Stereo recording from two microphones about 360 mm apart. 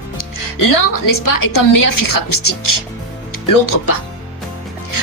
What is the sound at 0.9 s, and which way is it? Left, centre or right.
Speech, left.